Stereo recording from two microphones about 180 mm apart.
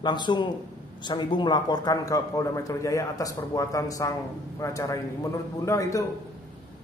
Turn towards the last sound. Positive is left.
turn(degrees=15)  # may be behind; listen again after turning